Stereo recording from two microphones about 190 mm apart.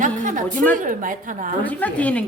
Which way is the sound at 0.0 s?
40° right (ahead or behind).